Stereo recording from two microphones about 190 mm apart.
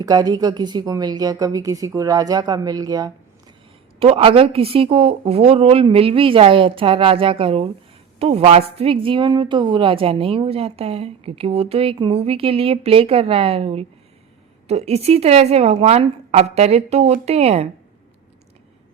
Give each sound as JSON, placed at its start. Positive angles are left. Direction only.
{"t": 0.0, "sound": "a woman's voice", "side_deg": -20}
{"t": 4.0, "sound": "a woman's voice", "side_deg": -30}